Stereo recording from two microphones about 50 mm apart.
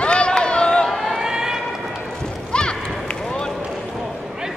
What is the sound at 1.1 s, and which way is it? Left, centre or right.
Run, centre.